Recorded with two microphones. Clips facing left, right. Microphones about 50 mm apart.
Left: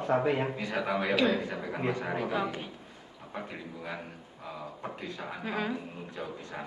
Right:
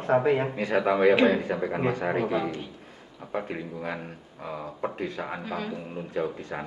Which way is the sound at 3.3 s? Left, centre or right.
Right.